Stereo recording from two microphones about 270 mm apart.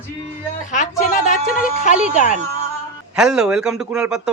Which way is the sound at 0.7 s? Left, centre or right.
Left.